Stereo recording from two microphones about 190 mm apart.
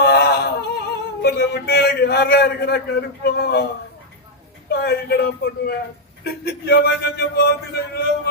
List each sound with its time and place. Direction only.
0.0 s a sound: 55° left (ahead or behind)
1.2 s a man's voice: 60° left (ahead or behind)
4.7 s a man's voice: 60° left (ahead or behind)